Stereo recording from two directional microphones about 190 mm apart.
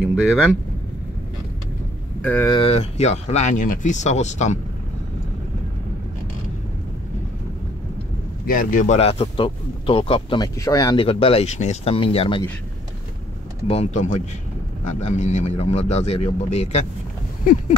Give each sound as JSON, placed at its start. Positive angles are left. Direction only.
{"t": 0.0, "sound": "speech", "side_deg": -5}
{"t": 2.2, "sound": "speech", "side_deg": 10}
{"t": 2.5, "sound": "speech", "side_deg": 30}
{"t": 8.5, "sound": "speech", "side_deg": 45}
{"t": 11.1, "sound": "speech", "side_deg": 30}
{"t": 13.7, "sound": "speech", "side_deg": 35}